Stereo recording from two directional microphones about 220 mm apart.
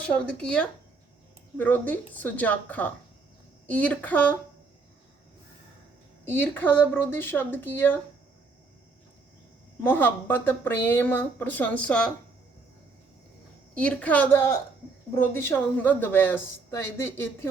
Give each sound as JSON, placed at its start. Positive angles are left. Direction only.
{"t": 0.0, "sound": "speech", "side_deg": 5}
{"t": 6.2, "sound": "speech", "side_deg": 10}
{"t": 9.8, "sound": "speech", "side_deg": 10}
{"t": 13.7, "sound": "speech", "side_deg": 5}